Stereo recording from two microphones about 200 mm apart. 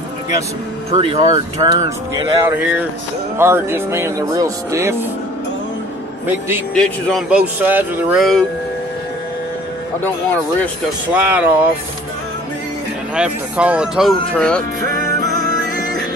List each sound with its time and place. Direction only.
0.9 s speech: 30° right (ahead or behind); by 4.9 s 15° right (ahead or behind)
6.7 s speech: 5° left (ahead or behind)
11.1 s speech: 10° right (ahead or behind)
13.1 s speech: 5° right (ahead or behind)